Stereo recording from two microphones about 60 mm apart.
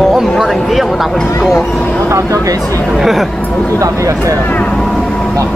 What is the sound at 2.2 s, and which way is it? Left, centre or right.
Speech, right.